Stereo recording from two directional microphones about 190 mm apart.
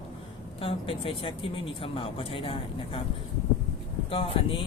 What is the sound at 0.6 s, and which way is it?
Speech, 30° left (ahead or behind).